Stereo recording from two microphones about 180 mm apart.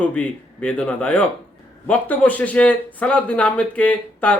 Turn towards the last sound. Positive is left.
turn(degrees=10)  # may be behind; listen again after turning